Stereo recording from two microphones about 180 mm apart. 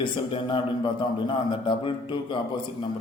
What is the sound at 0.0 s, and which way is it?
A man's voice, 30° left (ahead or behind).